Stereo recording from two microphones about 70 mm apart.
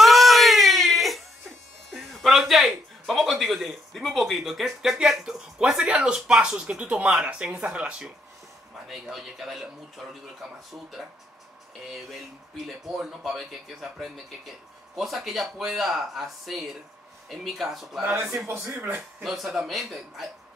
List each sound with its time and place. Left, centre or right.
0.0 s baby cry: centre
1.9 s a sound: centre
5.6 s speech: centre
8.8 s speech: centre
18.8 s speech: right
19.2 s speech: centre